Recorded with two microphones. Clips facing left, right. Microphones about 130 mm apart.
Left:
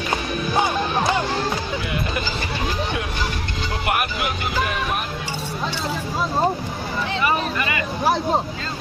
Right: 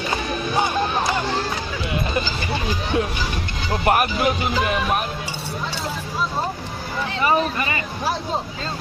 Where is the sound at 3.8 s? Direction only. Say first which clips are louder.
Right 5 dB; 40° right (ahead or behind).